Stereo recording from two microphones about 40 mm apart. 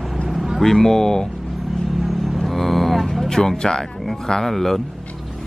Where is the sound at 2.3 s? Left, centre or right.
Centre.